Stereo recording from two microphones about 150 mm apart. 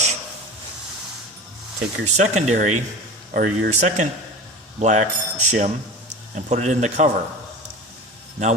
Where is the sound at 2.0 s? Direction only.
50° right (ahead or behind).